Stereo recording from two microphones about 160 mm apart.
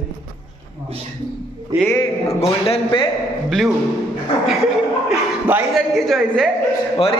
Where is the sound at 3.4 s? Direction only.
Centre (ahead or behind).